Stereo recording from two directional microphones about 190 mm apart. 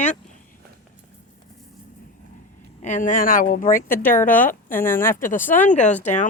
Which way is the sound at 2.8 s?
40° left (ahead or behind).